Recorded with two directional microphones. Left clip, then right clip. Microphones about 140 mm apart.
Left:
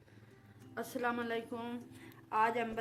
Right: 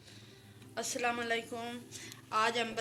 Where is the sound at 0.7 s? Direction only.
90° left.